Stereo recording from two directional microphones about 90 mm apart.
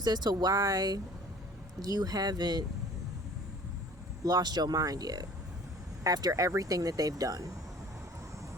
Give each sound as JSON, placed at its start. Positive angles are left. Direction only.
{"t": 0.0, "sound": "speech", "side_deg": -50}
{"t": 4.2, "sound": "speech", "side_deg": -45}